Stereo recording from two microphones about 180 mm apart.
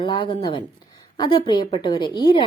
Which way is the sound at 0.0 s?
25° left (ahead or behind).